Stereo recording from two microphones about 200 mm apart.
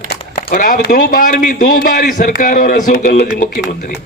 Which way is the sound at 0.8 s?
40° left (ahead or behind).